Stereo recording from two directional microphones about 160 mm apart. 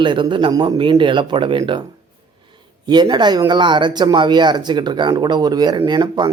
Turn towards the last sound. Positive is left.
turn(degrees=-25)  # may be behind; listen again after turning